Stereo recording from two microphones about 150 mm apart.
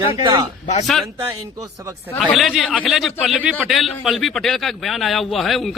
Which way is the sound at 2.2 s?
Centre (ahead or behind).